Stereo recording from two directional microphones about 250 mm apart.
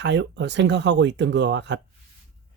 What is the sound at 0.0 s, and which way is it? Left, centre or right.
Speech, right.